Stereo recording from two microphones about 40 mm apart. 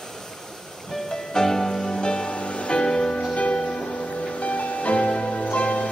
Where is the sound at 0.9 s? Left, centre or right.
Centre.